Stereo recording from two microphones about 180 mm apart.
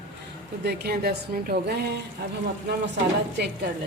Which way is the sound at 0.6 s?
60° right (ahead or behind).